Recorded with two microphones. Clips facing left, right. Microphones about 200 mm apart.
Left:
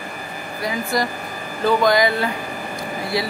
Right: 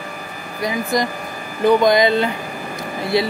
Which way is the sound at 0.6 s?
20° right (ahead or behind).